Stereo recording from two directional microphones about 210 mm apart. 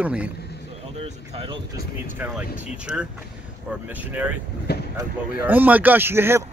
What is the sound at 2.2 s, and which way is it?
Speech, 5° right (ahead or behind).